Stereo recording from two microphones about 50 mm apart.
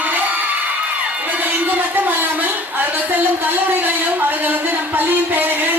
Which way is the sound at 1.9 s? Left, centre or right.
Right.